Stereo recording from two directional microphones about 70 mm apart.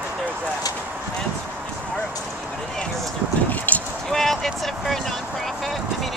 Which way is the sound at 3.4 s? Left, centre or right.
Left.